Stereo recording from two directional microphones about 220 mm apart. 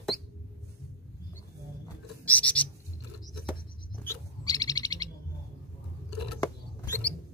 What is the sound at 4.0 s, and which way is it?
Bird, 15° left (ahead or behind).